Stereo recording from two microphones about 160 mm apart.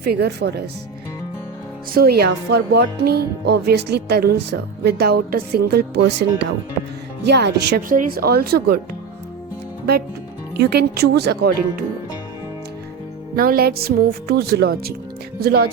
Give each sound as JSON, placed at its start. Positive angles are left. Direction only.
{"t": 0.0, "sound": "speech", "side_deg": -90}
{"t": 1.9, "sound": "speech", "side_deg": -75}
{"t": 10.6, "sound": "speech", "side_deg": -90}
{"t": 13.3, "sound": "speech", "side_deg": -65}